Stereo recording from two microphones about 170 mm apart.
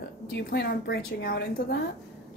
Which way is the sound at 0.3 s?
70° left (ahead or behind).